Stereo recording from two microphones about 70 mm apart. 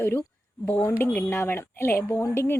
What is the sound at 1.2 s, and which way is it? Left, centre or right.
Speech, left.